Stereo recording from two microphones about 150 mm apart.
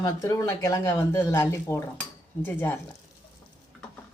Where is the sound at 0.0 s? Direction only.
20° left (ahead or behind).